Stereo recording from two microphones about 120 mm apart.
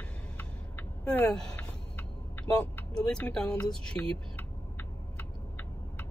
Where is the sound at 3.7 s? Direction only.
5° left (ahead or behind).